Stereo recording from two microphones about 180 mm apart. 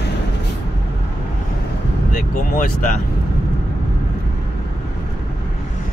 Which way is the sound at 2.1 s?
45° left (ahead or behind).